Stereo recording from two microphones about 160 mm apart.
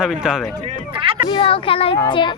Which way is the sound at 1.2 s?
35° left (ahead or behind).